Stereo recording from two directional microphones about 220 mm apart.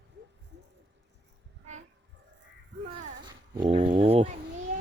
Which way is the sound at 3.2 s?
20° right (ahead or behind).